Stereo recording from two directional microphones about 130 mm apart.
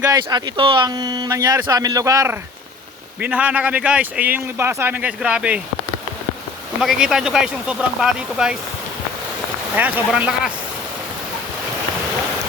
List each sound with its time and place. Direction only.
0.0 s speech: 30° right (ahead or behind)
0.9 s speech: 30° right (ahead or behind)
3.2 s speech: 10° right (ahead or behind)
6.8 s speech: 5° right (ahead or behind)
9.7 s speech: 15° right (ahead or behind)